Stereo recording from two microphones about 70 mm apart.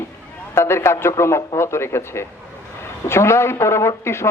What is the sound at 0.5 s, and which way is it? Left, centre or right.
A man's voice, left.